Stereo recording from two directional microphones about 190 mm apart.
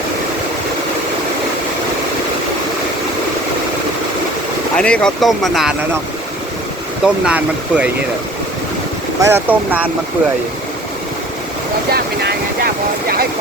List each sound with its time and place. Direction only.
4.8 s speech: 5° left (ahead or behind)
7.0 s speech: 5° right (ahead or behind)
9.2 s speech: 10° right (ahead or behind)
11.9 s boat: 55° right (ahead or behind)